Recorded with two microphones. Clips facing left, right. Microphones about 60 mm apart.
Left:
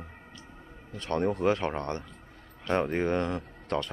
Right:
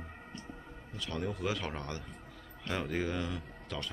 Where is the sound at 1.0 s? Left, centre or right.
Left.